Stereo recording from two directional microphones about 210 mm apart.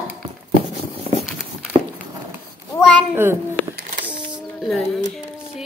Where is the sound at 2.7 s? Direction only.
5° left (ahead or behind).